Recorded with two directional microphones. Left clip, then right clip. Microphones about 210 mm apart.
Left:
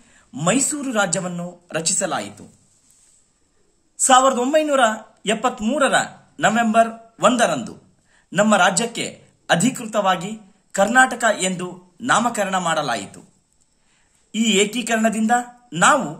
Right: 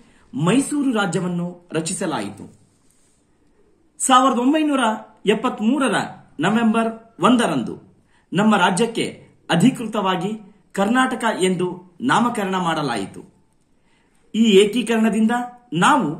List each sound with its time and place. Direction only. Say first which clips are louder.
0.1 s speech: even; 50° left (ahead or behind)
4.0 s speech: left 1 dB; 50° left (ahead or behind)
14.3 s speech: right 4 dB; 45° left (ahead or behind)